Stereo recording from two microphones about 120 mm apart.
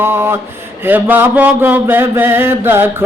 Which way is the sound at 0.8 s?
15° right (ahead or behind).